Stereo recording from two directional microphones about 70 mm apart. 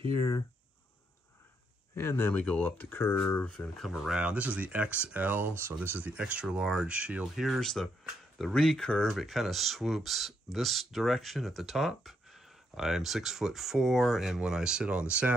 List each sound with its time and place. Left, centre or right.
2.0 s speech: left
2.3 s speech: left
3.4 s speech: centre
3.8 s speech: centre
4.2 s speech: centre
7.3 s speech: centre
8.0 s a sound: centre
8.5 s speech: centre